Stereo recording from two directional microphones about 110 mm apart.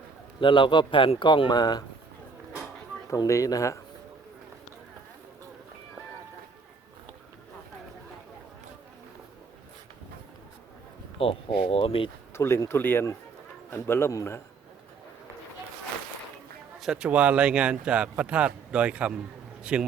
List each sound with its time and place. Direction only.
0.3 s speech: 45° left (ahead or behind)
3.1 s speech: 30° left (ahead or behind)
11.2 s speech: 60° left (ahead or behind)
12.3 s speech: 25° left (ahead or behind)
16.8 s speech: 5° right (ahead or behind)